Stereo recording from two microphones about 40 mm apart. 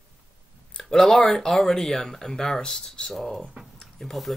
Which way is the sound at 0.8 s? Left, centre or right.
Centre.